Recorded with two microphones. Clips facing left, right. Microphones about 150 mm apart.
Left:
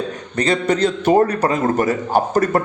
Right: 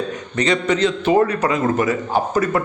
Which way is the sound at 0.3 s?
35° left (ahead or behind).